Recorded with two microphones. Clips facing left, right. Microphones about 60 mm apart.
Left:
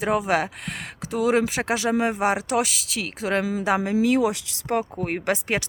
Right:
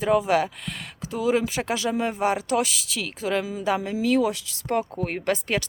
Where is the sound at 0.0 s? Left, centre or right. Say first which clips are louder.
Right 1 dB; left.